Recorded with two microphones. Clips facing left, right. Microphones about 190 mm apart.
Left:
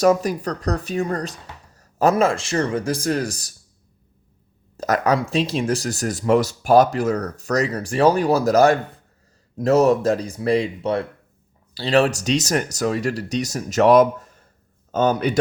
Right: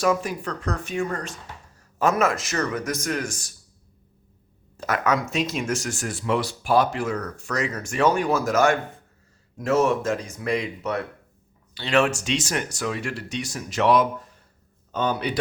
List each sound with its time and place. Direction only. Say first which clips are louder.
0.0 s speech: left 6 dB; 40° left (ahead or behind)
4.8 s speech: left 4 dB; 35° left (ahead or behind)